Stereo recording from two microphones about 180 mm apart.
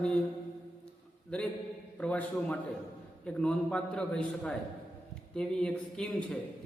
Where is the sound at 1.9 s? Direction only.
5° left (ahead or behind).